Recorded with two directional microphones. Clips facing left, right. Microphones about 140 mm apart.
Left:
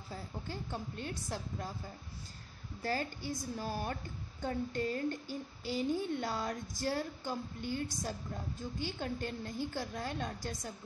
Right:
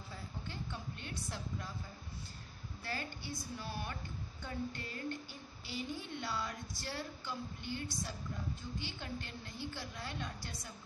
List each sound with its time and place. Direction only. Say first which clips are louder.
0.1 s a woman's voice: left 5 dB; 40° left (ahead or behind)
2.8 s a woman's voice: left 7 dB; 40° left (ahead or behind)